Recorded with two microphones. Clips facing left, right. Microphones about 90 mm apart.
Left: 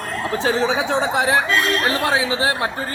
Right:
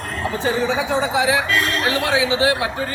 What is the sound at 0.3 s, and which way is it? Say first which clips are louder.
Speech: left 1 dB; 75° left (ahead or behind).